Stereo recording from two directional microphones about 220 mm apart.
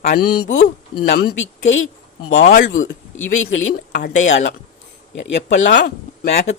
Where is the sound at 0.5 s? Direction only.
30° left (ahead or behind).